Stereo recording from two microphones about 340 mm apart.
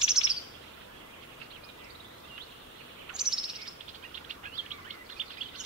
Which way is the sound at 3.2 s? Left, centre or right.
Centre.